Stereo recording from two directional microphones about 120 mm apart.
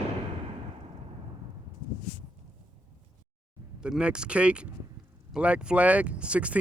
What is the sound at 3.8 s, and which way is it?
Speech, 10° right (ahead or behind).